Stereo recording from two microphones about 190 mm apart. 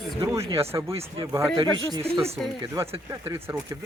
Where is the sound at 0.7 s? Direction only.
15° right (ahead or behind).